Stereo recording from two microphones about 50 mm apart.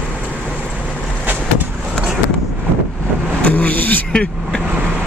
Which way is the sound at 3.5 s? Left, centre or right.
Left.